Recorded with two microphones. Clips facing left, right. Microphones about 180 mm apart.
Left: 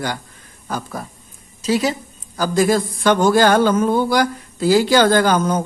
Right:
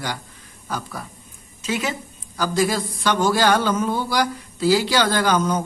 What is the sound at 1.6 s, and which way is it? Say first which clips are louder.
Speech: left 7 dB; 35° left (ahead or behind).